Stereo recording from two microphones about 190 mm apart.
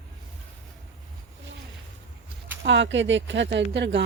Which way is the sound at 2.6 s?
70° right (ahead or behind).